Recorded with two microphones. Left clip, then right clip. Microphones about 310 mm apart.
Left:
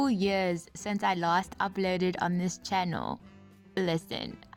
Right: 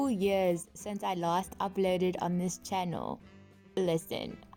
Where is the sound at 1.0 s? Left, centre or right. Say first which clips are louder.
Left 4 dB; left.